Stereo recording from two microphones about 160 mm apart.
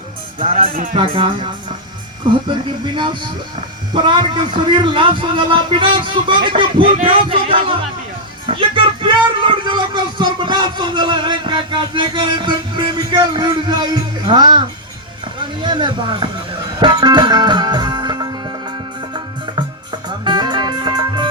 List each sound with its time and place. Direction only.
0.5 s music: 60° right (ahead or behind)
0.9 s a man's voice: 35° right (ahead or behind)
15.6 s speech: 30° right (ahead or behind)
16.8 s music: 25° right (ahead or behind)